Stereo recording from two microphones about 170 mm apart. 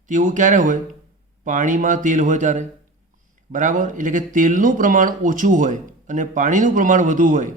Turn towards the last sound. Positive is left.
turn(degrees=-50)  # may be behind; listen again after turning